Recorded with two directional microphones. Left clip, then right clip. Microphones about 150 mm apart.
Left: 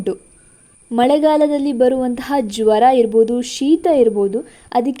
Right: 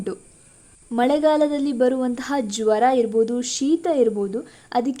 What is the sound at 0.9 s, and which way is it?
A woman's voice, 20° left (ahead or behind).